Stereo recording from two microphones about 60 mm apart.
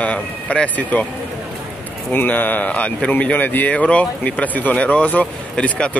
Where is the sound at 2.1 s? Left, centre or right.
Left.